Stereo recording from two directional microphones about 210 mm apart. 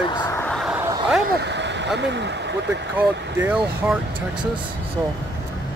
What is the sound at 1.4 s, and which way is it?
Vehicle, 55° right (ahead or behind).